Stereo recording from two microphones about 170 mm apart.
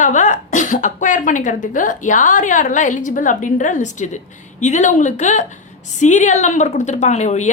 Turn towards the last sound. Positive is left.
turn(degrees=45)  # may be behind; listen again after turning